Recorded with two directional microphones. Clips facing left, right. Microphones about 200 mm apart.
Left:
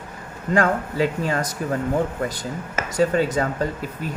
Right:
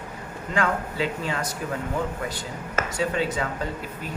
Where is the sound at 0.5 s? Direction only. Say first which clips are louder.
Left 5 dB; 45° left (ahead or behind).